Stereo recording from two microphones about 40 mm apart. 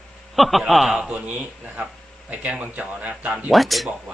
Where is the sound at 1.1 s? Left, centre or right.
Right.